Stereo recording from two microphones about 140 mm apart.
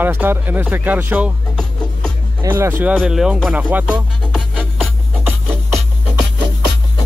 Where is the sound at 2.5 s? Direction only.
15° right (ahead or behind).